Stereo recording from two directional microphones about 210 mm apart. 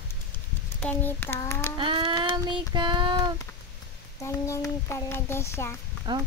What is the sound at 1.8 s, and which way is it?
Child singing, 25° right (ahead or behind).